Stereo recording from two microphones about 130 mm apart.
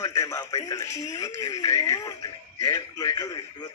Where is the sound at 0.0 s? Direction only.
25° left (ahead or behind).